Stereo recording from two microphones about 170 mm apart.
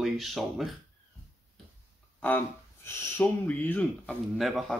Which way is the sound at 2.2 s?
10° left (ahead or behind).